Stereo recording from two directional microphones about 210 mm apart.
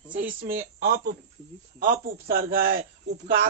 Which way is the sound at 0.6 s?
45° right (ahead or behind).